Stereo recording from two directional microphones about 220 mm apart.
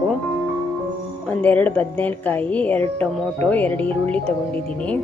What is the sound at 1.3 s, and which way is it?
Speech, 5° left (ahead or behind).